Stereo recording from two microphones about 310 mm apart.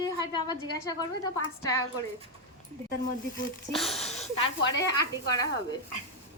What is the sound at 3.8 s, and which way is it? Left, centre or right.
Speech, centre.